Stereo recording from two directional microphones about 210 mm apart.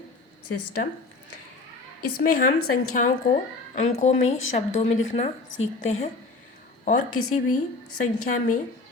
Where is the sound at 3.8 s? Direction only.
35° left (ahead or behind).